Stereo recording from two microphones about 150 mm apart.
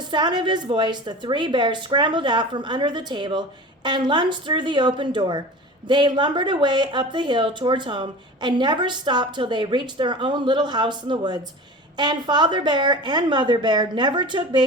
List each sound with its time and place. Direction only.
0.1 s a woman's voice: 30° right (ahead or behind)